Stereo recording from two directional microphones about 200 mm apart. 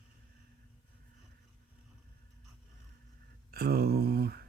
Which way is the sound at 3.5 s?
50° right (ahead or behind).